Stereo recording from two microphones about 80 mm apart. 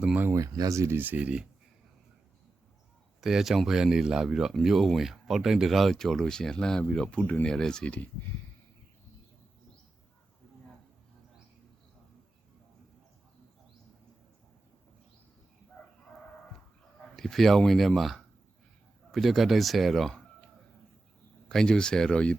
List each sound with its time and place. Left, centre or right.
0.3 s speech: right
0.9 s speech: right
3.2 s speech: centre
15.8 s crowing: left
17.2 s speech: centre
21.5 s speech: centre